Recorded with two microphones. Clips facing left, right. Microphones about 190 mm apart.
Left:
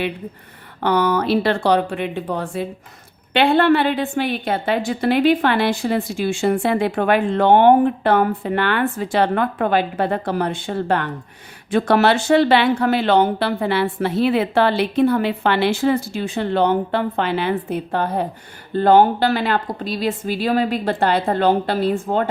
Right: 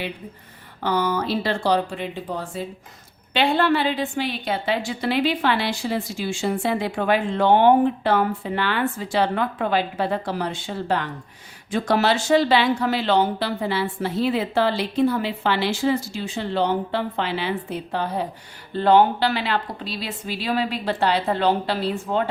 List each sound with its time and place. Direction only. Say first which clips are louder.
0.8 s a woman's voice: left 5 dB; 65° left (ahead or behind)